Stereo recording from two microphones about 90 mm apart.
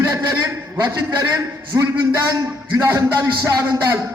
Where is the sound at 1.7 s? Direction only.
50° right (ahead or behind).